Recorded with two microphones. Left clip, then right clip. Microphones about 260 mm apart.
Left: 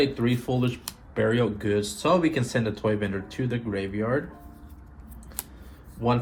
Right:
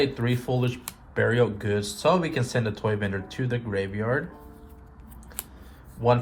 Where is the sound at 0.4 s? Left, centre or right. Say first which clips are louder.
Even; right.